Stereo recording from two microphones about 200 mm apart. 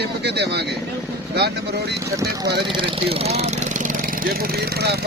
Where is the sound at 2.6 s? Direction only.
25° right (ahead or behind); by 5.0 s 50° right (ahead or behind).